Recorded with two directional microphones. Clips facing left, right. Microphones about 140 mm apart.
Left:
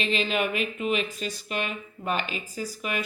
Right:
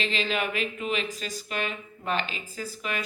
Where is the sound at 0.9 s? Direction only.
35° right (ahead or behind).